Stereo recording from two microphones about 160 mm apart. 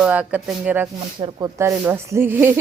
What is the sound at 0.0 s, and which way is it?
Speech, 10° right (ahead or behind).